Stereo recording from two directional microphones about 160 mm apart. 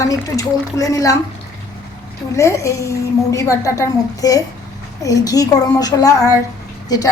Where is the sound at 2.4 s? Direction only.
20° left (ahead or behind).